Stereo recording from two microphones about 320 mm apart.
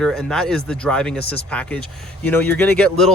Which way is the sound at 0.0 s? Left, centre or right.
Centre.